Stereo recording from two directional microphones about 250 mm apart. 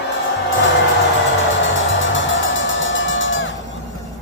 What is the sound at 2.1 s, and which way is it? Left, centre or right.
Music, left.